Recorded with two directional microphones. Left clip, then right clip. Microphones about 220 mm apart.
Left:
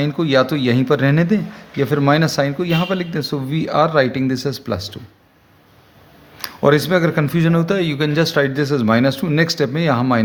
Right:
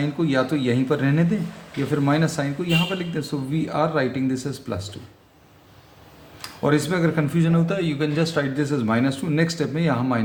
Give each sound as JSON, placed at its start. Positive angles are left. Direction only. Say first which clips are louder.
{"t": 0.0, "sound": "speech", "louder": "left 7 dB", "side_deg": 40}
{"t": 6.4, "sound": "speech", "louder": "left 7 dB", "side_deg": 40}